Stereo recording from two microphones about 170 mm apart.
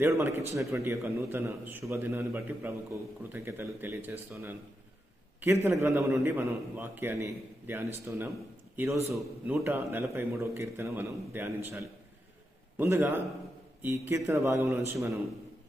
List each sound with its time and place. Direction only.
0.0 s a man's voice: 15° right (ahead or behind)
5.6 s a man's voice: 15° right (ahead or behind)
9.1 s a man's voice: centre (ahead or behind)
9.6 s a man's voice: 15° right (ahead or behind)